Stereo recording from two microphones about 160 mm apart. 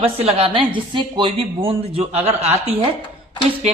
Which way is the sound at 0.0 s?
40° right (ahead or behind).